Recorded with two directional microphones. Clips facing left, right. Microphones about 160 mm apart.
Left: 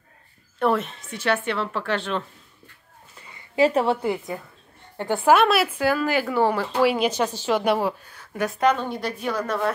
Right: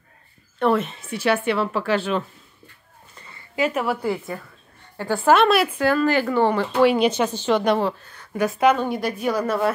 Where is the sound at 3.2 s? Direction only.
15° left (ahead or behind).